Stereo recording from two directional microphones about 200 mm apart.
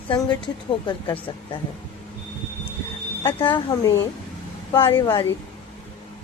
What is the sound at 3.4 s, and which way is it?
A woman's voice, 25° left (ahead or behind).